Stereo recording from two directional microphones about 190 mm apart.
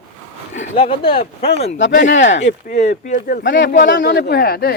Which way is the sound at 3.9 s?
65° left (ahead or behind).